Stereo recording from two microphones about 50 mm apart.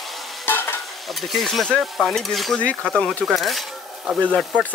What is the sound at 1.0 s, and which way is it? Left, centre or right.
Stir, centre.